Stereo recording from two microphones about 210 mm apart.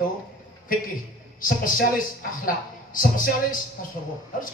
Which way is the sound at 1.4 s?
40° left (ahead or behind).